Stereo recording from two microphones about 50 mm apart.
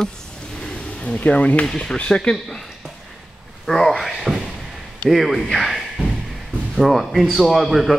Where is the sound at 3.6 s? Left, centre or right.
Centre.